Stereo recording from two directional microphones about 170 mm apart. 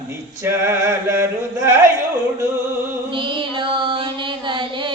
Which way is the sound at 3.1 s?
30° right (ahead or behind).